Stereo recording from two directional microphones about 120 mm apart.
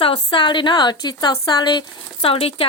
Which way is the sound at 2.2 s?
50° left (ahead or behind).